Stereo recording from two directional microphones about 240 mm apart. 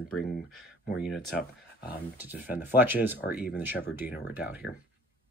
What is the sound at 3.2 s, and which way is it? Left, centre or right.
Speech, left.